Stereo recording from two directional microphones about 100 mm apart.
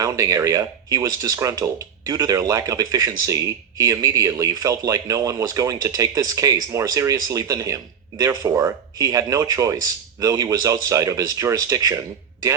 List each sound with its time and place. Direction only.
0.0 s speech: 35° right (ahead or behind)